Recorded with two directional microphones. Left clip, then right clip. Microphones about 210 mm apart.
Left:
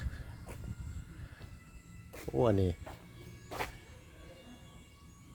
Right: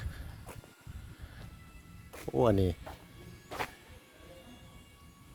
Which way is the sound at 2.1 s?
15° right (ahead or behind).